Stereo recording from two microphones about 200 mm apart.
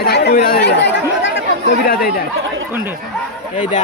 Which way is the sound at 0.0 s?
55° left (ahead or behind).